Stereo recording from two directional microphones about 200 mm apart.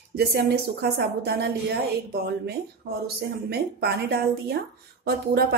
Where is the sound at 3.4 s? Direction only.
55° right (ahead or behind).